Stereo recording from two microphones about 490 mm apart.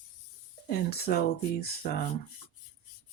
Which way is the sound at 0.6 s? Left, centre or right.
Centre.